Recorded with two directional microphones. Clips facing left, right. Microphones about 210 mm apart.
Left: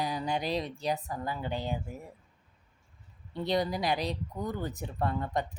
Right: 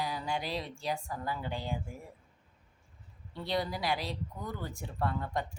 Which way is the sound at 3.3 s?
20° left (ahead or behind).